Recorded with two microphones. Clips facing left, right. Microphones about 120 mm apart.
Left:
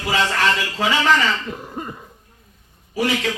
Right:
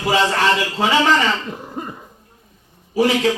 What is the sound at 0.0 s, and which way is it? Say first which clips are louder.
A man's voice: right 3 dB; 30° right (ahead or behind).